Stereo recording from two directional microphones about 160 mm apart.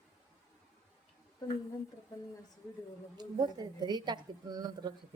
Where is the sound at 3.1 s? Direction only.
25° right (ahead or behind).